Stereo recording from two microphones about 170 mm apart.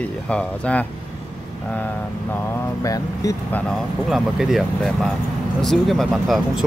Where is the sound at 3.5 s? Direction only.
5° left (ahead or behind).